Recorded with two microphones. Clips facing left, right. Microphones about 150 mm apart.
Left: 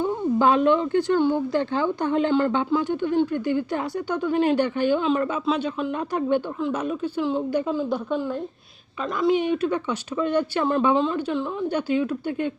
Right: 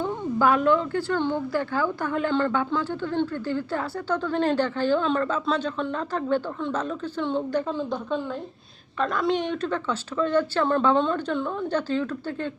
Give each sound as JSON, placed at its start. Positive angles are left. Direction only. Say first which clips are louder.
{"t": 0.0, "sound": "speech", "louder": "left 3 dB", "side_deg": 25}